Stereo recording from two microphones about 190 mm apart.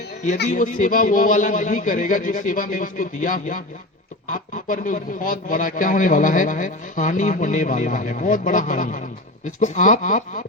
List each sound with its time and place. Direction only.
0.4 s a man's voice: 40° left (ahead or behind)